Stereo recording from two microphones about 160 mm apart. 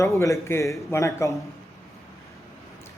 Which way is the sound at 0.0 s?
20° left (ahead or behind).